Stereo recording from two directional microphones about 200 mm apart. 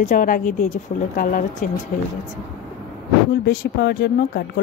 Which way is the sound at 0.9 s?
30° left (ahead or behind).